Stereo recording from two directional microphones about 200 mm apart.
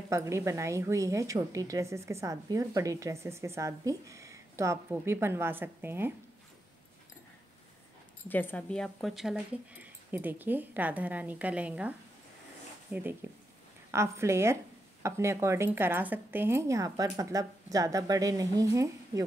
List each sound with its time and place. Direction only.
0.1 s a woman's voice: 15° right (ahead or behind)
8.3 s a woman's voice: 10° left (ahead or behind); by 11.9 s 5° right (ahead or behind)
12.9 s a woman's voice: 10° right (ahead or behind)